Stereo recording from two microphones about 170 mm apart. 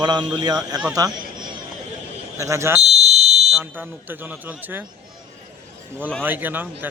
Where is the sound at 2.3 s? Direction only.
15° right (ahead or behind).